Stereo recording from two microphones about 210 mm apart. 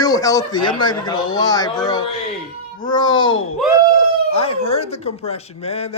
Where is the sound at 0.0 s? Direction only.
15° left (ahead or behind).